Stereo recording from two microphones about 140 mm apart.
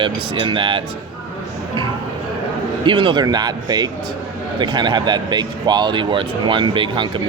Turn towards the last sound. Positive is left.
turn(degrees=-35)  # may be behind; listen again after turning